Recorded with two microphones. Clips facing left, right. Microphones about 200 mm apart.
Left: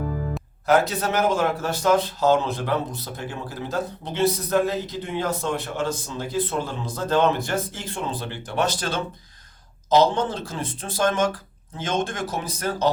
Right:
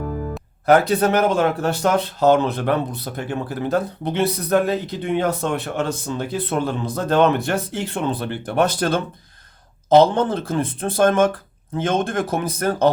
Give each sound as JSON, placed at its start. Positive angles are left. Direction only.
{"t": 0.6, "sound": "speech", "side_deg": -60}